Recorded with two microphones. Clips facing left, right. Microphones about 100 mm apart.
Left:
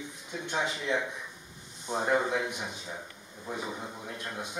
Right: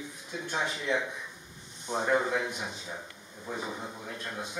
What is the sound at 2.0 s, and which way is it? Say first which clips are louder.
A man's voice: even; 10° left (ahead or behind).